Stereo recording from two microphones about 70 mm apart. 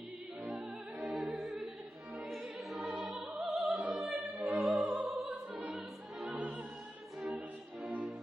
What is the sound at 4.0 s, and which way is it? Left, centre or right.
Opera, centre.